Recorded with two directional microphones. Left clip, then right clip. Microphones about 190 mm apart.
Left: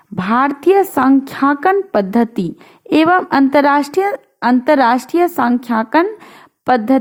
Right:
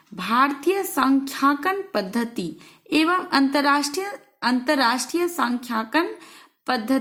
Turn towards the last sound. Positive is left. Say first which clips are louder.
# left 10 dB
turn(degrees=45)  # may be behind; listen again after turning